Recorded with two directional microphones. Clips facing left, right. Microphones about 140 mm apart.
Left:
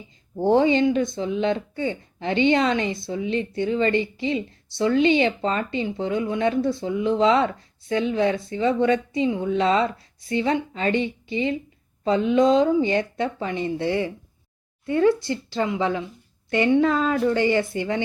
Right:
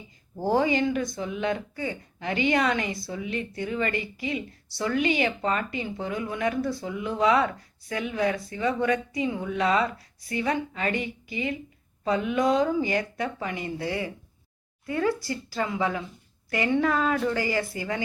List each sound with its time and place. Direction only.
0.3 s speech: 25° left (ahead or behind)